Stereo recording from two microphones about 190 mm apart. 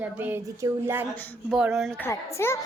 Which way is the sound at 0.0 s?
10° right (ahead or behind).